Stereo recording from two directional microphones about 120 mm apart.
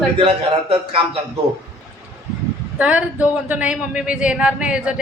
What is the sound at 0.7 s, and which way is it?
Speech, 45° right (ahead or behind).